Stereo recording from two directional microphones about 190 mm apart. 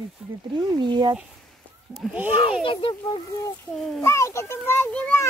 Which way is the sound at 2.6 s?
25° left (ahead or behind).